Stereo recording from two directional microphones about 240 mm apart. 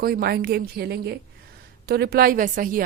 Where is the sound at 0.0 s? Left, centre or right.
Right.